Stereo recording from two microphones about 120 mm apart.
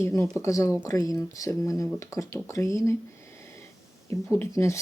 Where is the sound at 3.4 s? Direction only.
20° left (ahead or behind).